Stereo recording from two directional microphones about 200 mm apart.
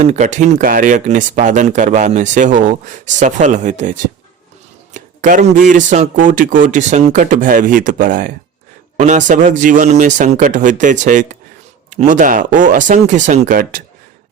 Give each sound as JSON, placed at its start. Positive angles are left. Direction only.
{"t": 0.0, "sound": "speech", "side_deg": -35}